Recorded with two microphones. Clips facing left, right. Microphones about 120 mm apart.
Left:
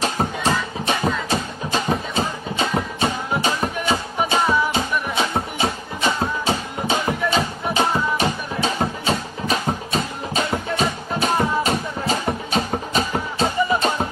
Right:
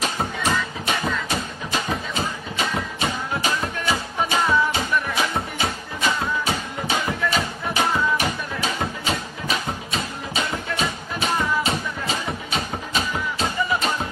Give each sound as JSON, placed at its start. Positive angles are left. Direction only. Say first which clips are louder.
{"t": 0.0, "sound": "music", "louder": "left 3 dB", "side_deg": 30}